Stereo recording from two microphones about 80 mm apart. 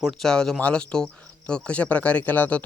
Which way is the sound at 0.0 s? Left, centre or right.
Centre.